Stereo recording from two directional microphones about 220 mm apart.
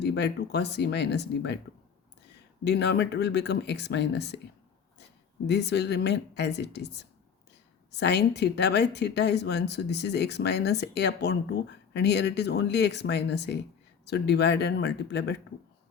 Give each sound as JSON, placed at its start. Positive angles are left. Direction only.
{"t": 0.0, "sound": "speech", "side_deg": 50}
{"t": 2.6, "sound": "speech", "side_deg": 50}
{"t": 5.5, "sound": "speech", "side_deg": 50}